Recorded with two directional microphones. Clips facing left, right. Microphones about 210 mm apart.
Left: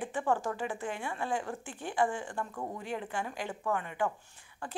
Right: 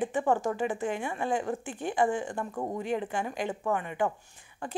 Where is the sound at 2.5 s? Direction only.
35° right (ahead or behind).